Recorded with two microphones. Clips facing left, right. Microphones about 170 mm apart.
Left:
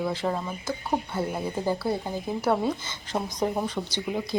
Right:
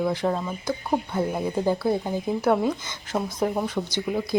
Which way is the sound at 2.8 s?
15° right (ahead or behind).